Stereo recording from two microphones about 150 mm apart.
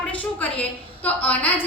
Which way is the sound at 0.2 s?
10° left (ahead or behind).